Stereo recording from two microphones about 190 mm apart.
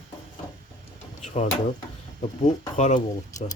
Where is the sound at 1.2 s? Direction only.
35° left (ahead or behind).